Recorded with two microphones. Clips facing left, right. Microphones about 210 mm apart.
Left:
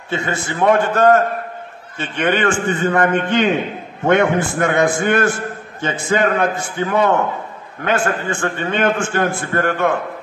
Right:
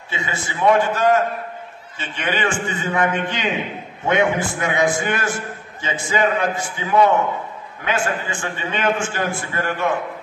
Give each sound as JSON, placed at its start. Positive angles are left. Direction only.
{"t": 0.1, "sound": "a man's voice", "side_deg": 55}